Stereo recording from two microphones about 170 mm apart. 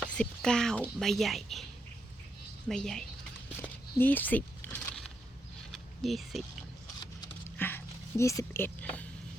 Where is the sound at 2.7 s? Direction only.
5° left (ahead or behind).